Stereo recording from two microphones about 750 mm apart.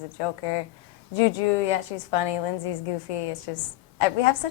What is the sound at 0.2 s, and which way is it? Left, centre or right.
A woman's voice, left.